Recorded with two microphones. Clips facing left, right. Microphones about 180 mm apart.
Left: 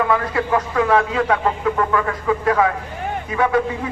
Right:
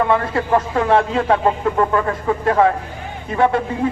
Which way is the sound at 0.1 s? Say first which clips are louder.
Right 2 dB; 25° right (ahead or behind).